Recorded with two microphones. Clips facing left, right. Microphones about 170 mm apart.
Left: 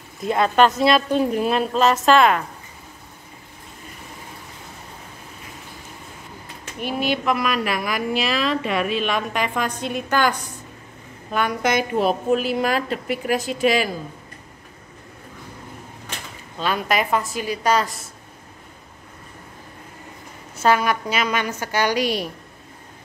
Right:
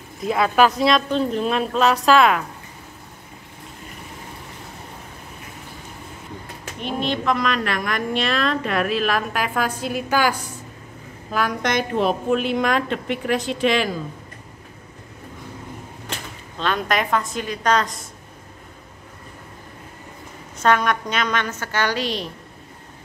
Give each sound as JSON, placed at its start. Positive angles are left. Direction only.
{"t": 0.2, "sound": "a woman's voice", "side_deg": 0}
{"t": 6.8, "sound": "a woman's voice", "side_deg": 5}
{"t": 11.3, "sound": "a woman's voice", "side_deg": 5}
{"t": 16.5, "sound": "a woman's voice", "side_deg": 5}
{"t": 20.5, "sound": "a woman's voice", "side_deg": 5}